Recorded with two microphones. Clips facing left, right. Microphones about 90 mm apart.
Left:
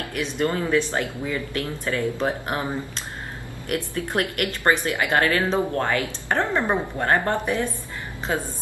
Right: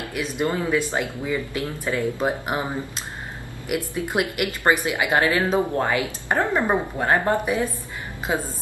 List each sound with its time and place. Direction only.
0.1 s speech: 10° right (ahead or behind)